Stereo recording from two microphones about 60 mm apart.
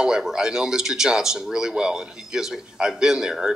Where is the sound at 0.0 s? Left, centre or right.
Centre.